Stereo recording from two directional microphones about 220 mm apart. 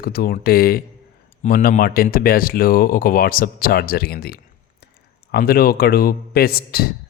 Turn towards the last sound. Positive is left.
turn(degrees=45)  # may be behind; listen again after turning